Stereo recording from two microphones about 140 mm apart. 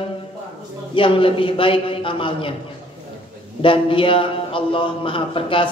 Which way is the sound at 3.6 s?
40° left (ahead or behind).